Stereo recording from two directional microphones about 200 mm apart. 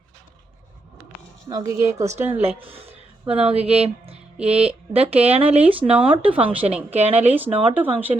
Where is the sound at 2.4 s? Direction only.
30° right (ahead or behind).